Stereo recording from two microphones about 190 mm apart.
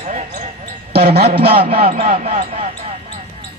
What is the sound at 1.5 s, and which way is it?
Speech, 30° right (ahead or behind).